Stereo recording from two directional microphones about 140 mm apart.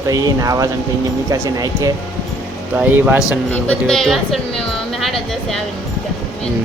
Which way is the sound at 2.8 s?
15° right (ahead or behind).